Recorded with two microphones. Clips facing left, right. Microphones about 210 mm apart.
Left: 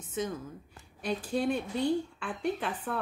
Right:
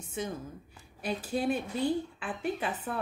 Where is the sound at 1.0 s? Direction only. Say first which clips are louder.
Left 1 dB; 5° right (ahead or behind).